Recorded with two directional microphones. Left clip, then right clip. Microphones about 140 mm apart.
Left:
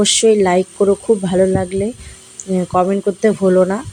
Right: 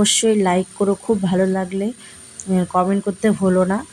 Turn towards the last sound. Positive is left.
turn(degrees=15)  # may be behind; listen again after turning